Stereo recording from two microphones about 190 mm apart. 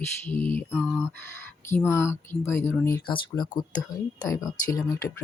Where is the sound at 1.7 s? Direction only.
15° left (ahead or behind).